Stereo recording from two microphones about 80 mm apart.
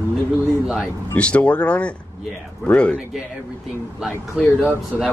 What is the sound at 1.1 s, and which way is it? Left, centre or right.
Speech, centre.